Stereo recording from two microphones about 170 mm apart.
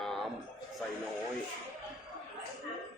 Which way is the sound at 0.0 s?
Centre (ahead or behind).